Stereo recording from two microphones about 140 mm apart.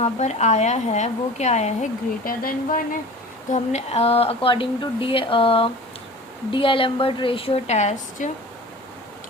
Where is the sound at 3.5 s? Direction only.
55° left (ahead or behind).